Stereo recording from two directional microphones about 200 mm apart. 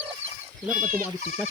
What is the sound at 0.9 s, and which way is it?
Speech, 10° right (ahead or behind).